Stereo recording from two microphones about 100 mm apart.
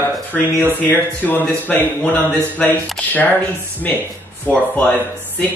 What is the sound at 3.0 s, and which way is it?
Speech, 15° left (ahead or behind).